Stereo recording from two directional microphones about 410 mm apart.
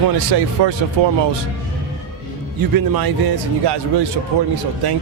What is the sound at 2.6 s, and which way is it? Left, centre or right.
Speech, right.